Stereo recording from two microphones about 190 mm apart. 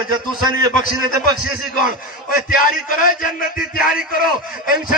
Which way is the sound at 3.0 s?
45° left (ahead or behind).